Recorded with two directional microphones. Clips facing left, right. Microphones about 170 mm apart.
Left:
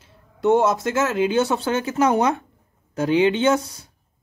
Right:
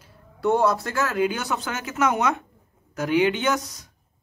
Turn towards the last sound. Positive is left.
turn(degrees=30)  # may be behind; listen again after turning